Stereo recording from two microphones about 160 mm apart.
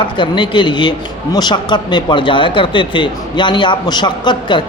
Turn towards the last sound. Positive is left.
turn(degrees=25)  # may be behind; listen again after turning